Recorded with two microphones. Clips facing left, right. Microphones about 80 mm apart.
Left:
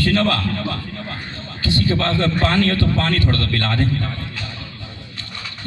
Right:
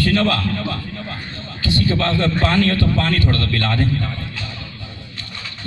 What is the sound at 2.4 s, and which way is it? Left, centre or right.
A man's voice, left.